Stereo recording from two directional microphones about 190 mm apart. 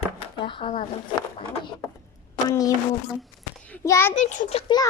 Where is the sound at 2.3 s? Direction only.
20° left (ahead or behind).